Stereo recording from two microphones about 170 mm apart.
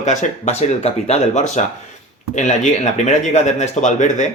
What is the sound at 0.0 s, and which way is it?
Speech, 45° left (ahead or behind).